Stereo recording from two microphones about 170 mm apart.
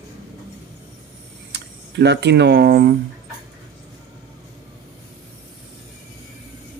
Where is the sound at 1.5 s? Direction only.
80° right.